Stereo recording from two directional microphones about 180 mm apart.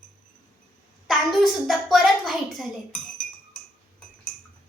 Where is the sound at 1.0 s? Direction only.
Centre (ahead or behind).